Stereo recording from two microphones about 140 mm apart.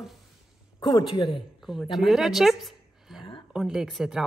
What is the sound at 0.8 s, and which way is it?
Speech, 30° left (ahead or behind).